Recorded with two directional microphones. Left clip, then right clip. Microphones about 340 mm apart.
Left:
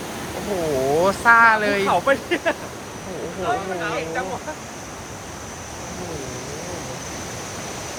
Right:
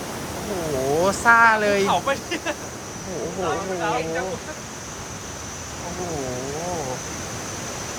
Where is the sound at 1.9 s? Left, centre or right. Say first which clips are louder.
Left 3 dB; centre.